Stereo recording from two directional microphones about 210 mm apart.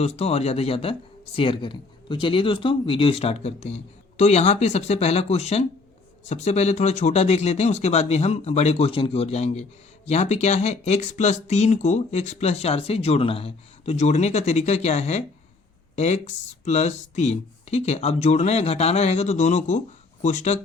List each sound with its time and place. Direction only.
0.0 s speech: 30° left (ahead or behind)